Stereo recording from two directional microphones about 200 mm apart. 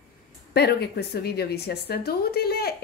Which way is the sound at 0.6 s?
55° left (ahead or behind).